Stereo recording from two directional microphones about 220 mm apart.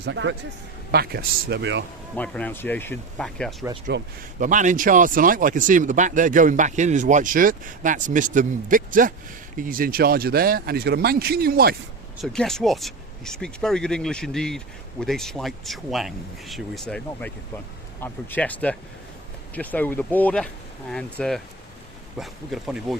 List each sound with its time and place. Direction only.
0.0 s speech: 55° right (ahead or behind)
2.1 s speech: 5° left (ahead or behind)
3.9 s speech: 50° right (ahead or behind)
4.4 s speech: 35° right (ahead or behind)
12.2 s speech: centre (ahead or behind)